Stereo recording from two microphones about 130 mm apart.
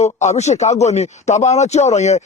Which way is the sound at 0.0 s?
60° left (ahead or behind).